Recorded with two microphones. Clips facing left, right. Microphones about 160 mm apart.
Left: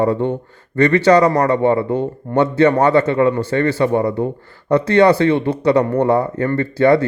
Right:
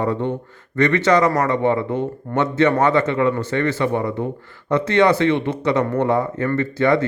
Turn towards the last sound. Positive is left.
turn(degrees=35)  # may be behind; listen again after turning